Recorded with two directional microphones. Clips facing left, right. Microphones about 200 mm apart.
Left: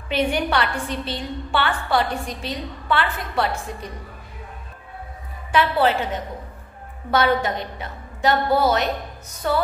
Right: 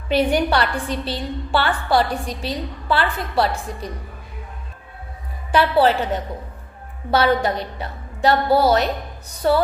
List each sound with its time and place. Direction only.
0.1 s a woman's voice: 35° right (ahead or behind)
5.5 s a woman's voice: 35° right (ahead or behind)
7.1 s a woman's voice: 35° right (ahead or behind)